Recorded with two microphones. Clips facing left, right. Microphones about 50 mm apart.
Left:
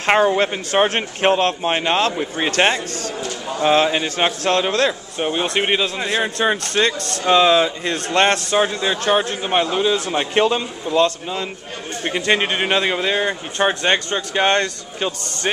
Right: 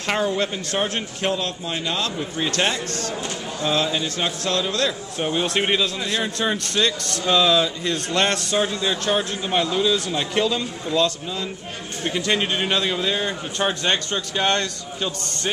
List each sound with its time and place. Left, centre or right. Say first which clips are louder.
0.0 s speech: left 7 dB; left
5.2 s speech: left 2 dB; centre